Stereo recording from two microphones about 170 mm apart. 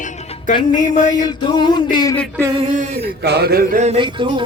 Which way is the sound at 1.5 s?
25° left (ahead or behind).